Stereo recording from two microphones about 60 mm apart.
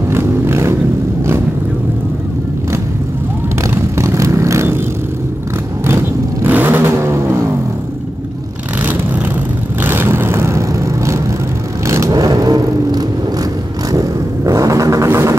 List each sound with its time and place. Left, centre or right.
0.1 s vehicle: right
3.6 s vehicle: right
6.4 s vehicle: right
6.8 s vehicle: right
9.8 s vehicle: right
12.2 s vehicle: right
13.9 s vehicle: right
15.0 s vehicle: right